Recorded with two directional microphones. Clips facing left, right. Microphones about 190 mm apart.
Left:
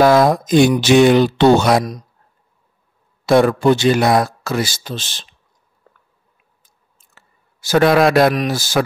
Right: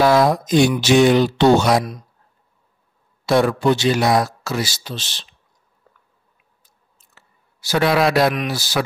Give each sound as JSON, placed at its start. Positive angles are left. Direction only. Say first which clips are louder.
{"t": 0.0, "sound": "a sound", "louder": "left 3 dB", "side_deg": 50}
{"t": 3.3, "sound": "speech", "louder": "left 4 dB", "side_deg": 50}
{"t": 7.2, "sound": "a man's voice", "louder": "left 2 dB", "side_deg": 50}